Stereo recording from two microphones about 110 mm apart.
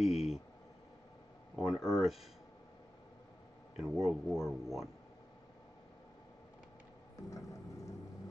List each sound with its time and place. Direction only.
0.0 s a sound: 5° right (ahead or behind)
1.6 s speech: 5° right (ahead or behind)
3.7 s speech: 5° right (ahead or behind)
7.2 s music: 30° left (ahead or behind)